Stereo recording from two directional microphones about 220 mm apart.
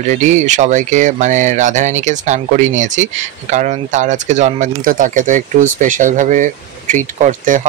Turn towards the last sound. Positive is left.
turn(degrees=-35)  # may be behind; listen again after turning